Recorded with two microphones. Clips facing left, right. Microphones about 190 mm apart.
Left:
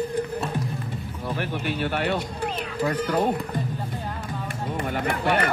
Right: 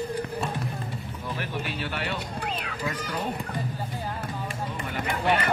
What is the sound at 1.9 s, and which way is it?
Speech, 50° left (ahead or behind).